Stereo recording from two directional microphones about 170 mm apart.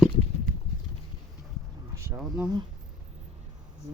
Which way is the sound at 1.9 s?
15° right (ahead or behind).